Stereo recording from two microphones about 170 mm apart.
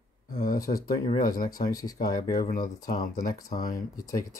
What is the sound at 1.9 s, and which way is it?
Speech, 55° left (ahead or behind).